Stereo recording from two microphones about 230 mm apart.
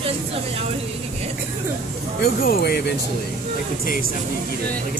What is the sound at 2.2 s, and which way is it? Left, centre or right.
Speech, left.